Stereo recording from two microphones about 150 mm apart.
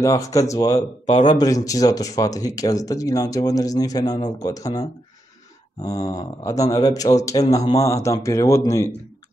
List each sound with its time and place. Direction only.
0.0 s speech: 20° left (ahead or behind)